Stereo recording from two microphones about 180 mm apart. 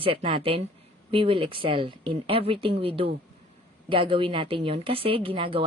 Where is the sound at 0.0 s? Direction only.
30° right (ahead or behind).